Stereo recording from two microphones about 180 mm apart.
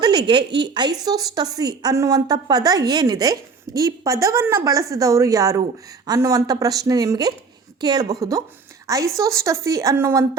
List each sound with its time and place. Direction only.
0.0 s a woman's voice: 25° right (ahead or behind)